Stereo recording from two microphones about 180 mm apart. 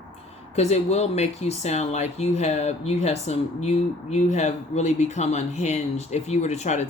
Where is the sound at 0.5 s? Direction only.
35° left (ahead or behind).